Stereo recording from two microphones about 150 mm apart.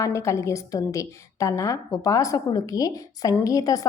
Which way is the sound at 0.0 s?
20° left (ahead or behind).